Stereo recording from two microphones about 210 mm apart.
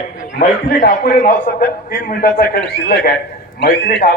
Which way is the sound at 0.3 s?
45° left (ahead or behind).